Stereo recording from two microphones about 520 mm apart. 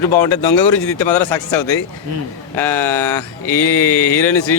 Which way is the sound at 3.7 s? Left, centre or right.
Left.